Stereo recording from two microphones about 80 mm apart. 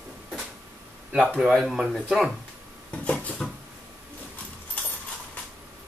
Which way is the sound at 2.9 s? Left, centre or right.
Centre.